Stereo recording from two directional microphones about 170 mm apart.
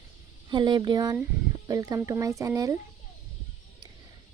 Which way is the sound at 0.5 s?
25° right (ahead or behind).